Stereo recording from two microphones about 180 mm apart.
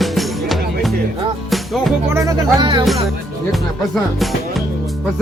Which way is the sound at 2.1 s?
20° right (ahead or behind).